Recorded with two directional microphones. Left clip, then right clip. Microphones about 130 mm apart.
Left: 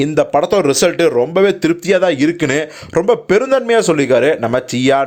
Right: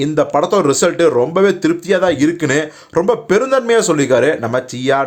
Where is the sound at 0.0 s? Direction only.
25° left (ahead or behind).